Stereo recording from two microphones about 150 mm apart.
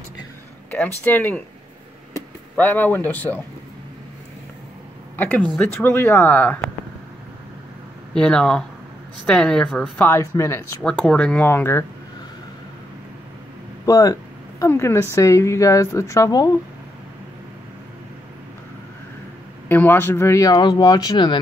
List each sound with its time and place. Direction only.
0.7 s speech: 10° left (ahead or behind)
2.5 s speech: 15° left (ahead or behind)
5.1 s speech: 10° left (ahead or behind)
8.1 s speech: 5° left (ahead or behind)
10.8 s speech: 5° left (ahead or behind)
13.8 s a woman's voice: 20° left (ahead or behind)
19.7 s a woman's voice: 15° left (ahead or behind); by 21.4 s 30° left (ahead or behind)